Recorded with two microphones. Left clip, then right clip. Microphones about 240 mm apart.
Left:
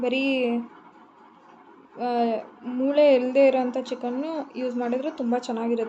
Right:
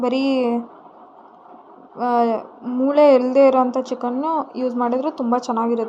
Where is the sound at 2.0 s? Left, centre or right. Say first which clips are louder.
Right 6 dB; right.